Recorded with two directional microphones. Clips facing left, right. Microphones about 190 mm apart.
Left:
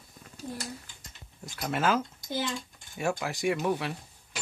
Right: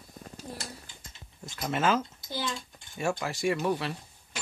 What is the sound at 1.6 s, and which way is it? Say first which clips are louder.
Speech: even; 5° left (ahead or behind).